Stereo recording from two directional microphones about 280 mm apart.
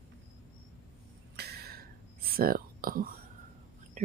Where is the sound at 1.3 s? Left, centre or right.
Right.